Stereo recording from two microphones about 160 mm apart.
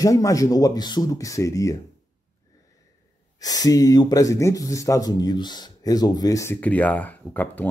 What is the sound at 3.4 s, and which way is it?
Speech, 25° left (ahead or behind).